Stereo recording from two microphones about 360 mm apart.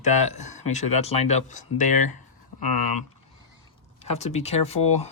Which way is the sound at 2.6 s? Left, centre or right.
Left.